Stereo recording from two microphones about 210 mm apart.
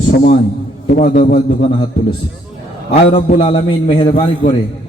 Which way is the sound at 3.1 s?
30° left (ahead or behind).